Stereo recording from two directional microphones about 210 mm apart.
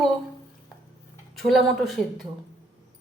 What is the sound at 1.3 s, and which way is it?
Speech, centre (ahead or behind).